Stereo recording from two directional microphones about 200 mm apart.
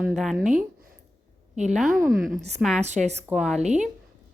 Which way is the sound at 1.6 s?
Centre (ahead or behind).